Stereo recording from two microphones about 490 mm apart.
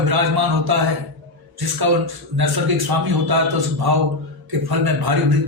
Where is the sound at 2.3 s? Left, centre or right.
Right.